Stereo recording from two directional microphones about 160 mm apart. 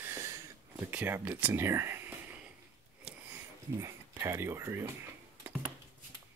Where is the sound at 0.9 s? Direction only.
10° right (ahead or behind).